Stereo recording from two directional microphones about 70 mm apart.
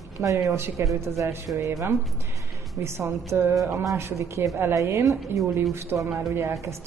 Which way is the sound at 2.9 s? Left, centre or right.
Right.